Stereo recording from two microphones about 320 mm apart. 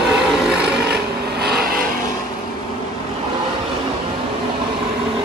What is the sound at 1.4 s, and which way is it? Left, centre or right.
Vehicle, right.